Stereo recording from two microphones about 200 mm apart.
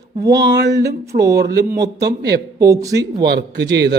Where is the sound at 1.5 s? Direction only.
50° right (ahead or behind).